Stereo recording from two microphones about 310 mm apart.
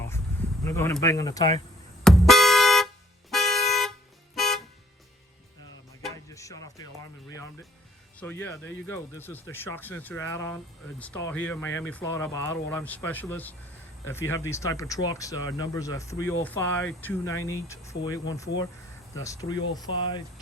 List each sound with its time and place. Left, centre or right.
0.6 s speech: centre
2.0 s vehicle horn: centre
6.2 s music: centre
8.2 s speech: centre